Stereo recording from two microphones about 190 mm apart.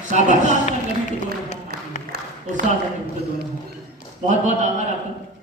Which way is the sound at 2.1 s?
55° right (ahead or behind).